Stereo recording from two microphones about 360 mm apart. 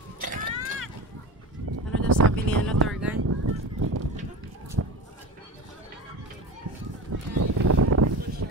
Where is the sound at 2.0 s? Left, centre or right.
Right.